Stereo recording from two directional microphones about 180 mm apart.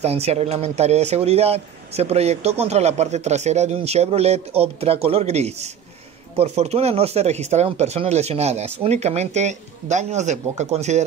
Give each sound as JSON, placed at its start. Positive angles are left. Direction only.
{"t": 0.0, "sound": "speech", "side_deg": -35}